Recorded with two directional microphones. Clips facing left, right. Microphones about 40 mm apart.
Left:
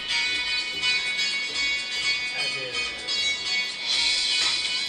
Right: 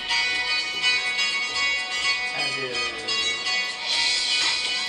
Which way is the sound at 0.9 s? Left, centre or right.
Right.